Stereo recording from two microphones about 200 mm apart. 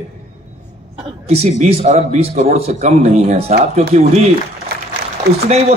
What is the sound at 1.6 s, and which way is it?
A man's voice, 35° right (ahead or behind).